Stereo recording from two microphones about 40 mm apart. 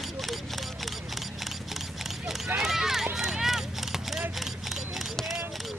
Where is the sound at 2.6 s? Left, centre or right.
Centre.